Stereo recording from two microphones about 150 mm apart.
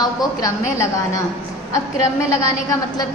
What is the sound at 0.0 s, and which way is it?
A woman's voice, 25° left (ahead or behind).